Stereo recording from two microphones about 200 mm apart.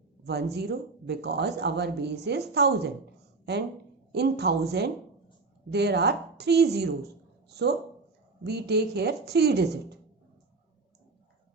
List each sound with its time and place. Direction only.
0.5 s speech: 55° right (ahead or behind)